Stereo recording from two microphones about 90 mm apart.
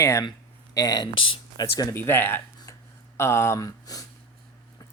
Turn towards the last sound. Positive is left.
turn(degrees=40)  # may be behind; listen again after turning